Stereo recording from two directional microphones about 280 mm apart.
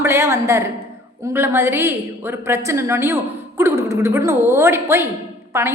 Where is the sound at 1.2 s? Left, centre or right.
Centre.